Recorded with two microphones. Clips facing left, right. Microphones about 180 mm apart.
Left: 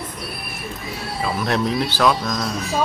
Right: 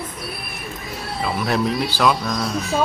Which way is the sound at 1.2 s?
Centre (ahead or behind).